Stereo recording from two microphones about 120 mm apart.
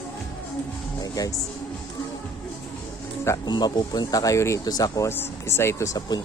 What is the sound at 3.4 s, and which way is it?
Speech, 35° left (ahead or behind).